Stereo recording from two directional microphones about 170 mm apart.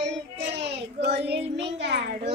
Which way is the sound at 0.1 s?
80° right.